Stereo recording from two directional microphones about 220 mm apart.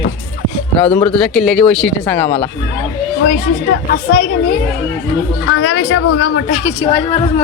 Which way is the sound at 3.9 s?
45° left (ahead or behind).